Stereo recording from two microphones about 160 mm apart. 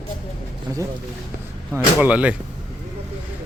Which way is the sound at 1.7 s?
10° right (ahead or behind).